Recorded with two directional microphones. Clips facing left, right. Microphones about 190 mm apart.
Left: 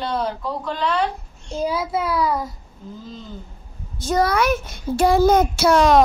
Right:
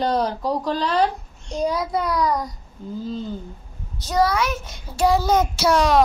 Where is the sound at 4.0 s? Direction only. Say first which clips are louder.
Left 1 dB; 55° left (ahead or behind).